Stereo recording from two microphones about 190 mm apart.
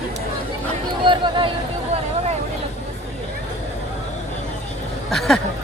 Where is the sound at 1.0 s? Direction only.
25° right (ahead or behind).